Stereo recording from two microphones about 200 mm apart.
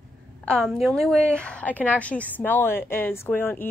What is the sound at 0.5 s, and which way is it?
A woman's voice, centre (ahead or behind).